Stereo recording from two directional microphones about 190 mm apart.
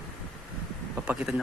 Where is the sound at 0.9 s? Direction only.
5° right (ahead or behind).